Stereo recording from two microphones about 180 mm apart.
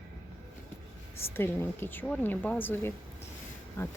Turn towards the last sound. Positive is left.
turn(degrees=10)  # may be behind; listen again after turning